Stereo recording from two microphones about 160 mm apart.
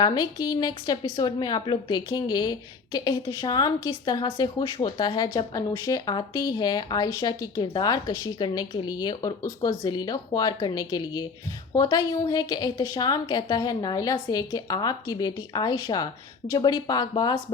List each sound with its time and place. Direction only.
0.0 s a woman's voice: 25° left (ahead or behind)